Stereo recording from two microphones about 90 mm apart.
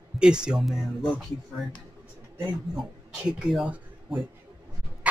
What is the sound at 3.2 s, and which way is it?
Speech, 10° right (ahead or behind).